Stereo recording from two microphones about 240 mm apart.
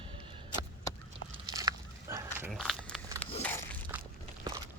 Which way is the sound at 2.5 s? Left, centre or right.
Centre.